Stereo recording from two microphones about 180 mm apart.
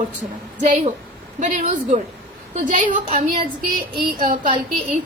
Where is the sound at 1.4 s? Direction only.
40° right (ahead or behind).